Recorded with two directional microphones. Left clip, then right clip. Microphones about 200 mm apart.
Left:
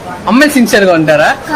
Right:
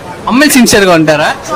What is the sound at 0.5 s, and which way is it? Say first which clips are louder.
Speech: right 2 dB; 45° right (ahead or behind).